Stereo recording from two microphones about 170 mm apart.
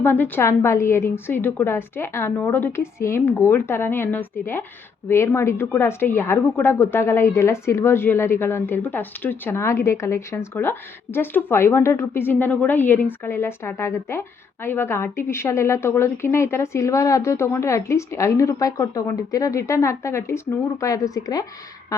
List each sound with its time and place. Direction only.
0.0 s a woman's voice: 15° left (ahead or behind)